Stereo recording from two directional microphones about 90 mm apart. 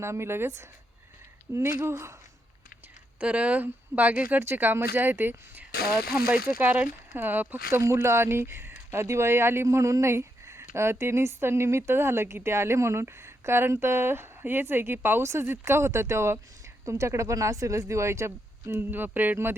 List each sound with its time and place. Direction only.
0.0 s speech: 30° right (ahead or behind)
3.2 s speech: 15° right (ahead or behind)